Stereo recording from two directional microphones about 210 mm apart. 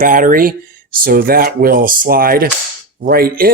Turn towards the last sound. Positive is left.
turn(degrees=-45)  # may be behind; listen again after turning